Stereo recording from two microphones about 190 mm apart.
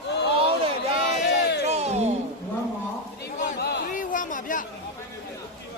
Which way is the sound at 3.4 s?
50° left (ahead or behind).